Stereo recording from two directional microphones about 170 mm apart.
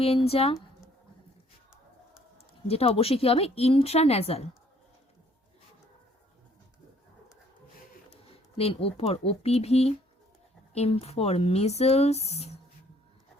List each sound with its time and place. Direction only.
0.0 s speech: 35° left (ahead or behind)
2.6 s speech: 35° left (ahead or behind)
8.3 s speech: 35° left (ahead or behind)